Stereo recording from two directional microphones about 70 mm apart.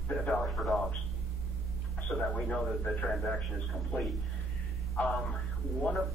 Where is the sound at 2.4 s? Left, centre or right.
Centre.